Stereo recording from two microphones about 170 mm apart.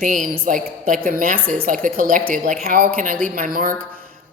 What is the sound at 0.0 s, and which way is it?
A woman's voice, 50° right (ahead or behind).